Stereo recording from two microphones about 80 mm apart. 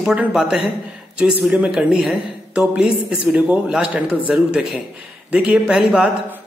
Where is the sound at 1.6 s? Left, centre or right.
Centre.